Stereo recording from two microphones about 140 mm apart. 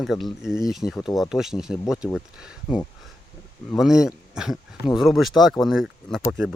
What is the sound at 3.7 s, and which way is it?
Speech, 5° right (ahead or behind).